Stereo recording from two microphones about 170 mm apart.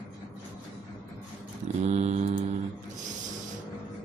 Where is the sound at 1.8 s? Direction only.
40° right (ahead or behind).